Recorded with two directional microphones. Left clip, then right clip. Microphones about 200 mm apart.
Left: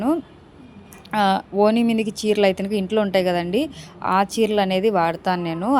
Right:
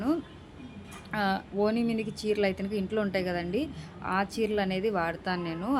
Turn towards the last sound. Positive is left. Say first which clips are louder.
# left 10 dB
turn(degrees=35)  # may be behind; listen again after turning